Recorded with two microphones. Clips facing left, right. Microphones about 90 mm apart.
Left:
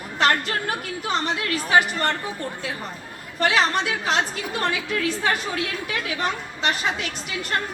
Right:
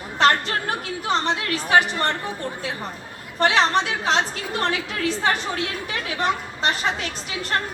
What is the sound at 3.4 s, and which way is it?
Speech, 30° right (ahead or behind).